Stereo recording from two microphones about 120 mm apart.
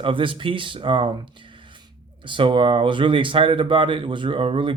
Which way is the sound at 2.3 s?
45° right (ahead or behind).